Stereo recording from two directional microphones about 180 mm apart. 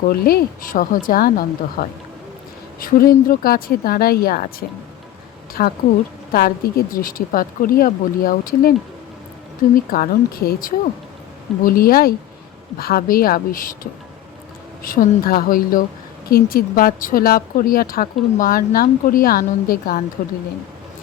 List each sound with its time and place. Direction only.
0.1 s speech: 55° left (ahead or behind)
5.6 s speech: 50° left (ahead or behind)
9.7 s speech: 55° left (ahead or behind)
14.8 s speech: 50° left (ahead or behind)